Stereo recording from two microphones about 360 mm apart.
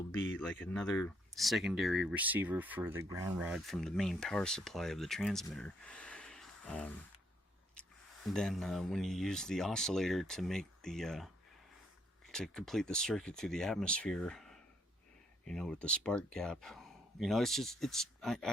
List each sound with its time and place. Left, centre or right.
0.1 s a sound: left
0.6 s speech: centre
12.3 s speech: centre